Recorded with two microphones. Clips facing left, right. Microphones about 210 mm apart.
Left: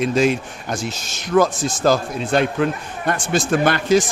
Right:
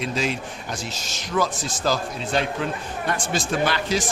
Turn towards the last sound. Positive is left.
turn(degrees=50)  # may be behind; listen again after turning